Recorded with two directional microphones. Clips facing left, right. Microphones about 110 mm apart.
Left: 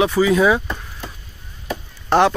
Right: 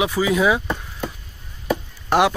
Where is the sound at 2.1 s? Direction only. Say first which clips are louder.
Left 2 dB; 15° right (ahead or behind).